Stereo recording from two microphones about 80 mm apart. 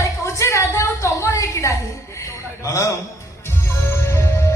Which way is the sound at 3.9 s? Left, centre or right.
Left.